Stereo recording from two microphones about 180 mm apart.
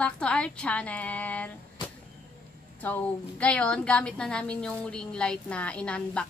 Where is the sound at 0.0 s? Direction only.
5° left (ahead or behind).